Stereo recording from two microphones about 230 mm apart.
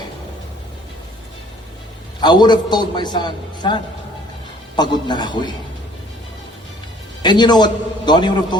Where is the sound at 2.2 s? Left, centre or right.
Centre.